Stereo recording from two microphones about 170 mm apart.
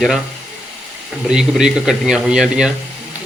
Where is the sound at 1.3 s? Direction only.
5° right (ahead or behind).